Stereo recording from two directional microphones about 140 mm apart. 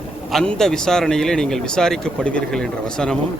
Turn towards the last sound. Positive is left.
turn(degrees=5)  # may be behind; listen again after turning